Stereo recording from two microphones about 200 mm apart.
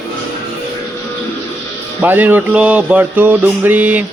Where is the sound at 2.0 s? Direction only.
10° right (ahead or behind).